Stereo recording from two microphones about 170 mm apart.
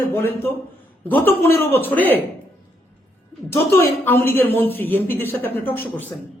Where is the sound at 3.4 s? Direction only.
15° left (ahead or behind).